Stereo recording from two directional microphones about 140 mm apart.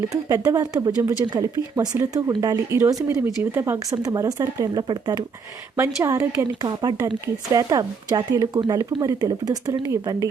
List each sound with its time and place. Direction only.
0.1 s speech: 25° right (ahead or behind)
5.7 s speech: 20° right (ahead or behind)